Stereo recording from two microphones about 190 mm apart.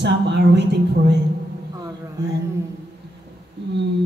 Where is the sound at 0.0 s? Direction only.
65° right (ahead or behind).